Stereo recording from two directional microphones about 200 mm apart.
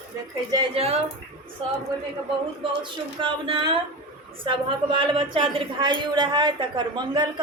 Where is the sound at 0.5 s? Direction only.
30° right (ahead or behind).